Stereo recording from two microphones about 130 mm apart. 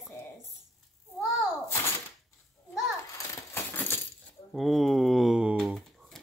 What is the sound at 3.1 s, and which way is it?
Coin, 15° left (ahead or behind).